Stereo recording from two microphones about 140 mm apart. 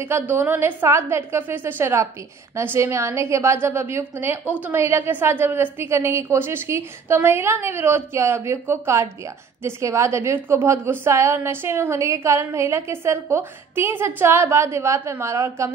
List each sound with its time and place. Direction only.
0.0 s a woman's voice: 15° right (ahead or behind)